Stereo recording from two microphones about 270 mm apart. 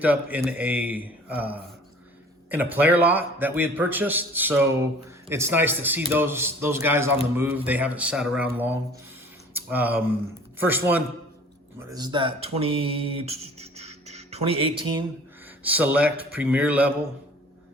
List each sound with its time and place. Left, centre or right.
0.0 s a man's voice: centre
9.5 s a sound: centre
10.6 s a man's voice: centre
15.6 s speech: centre